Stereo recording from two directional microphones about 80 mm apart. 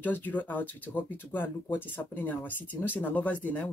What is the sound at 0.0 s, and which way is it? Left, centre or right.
Speech, left.